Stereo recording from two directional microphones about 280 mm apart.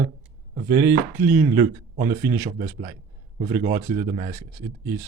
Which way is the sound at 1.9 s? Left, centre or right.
Right.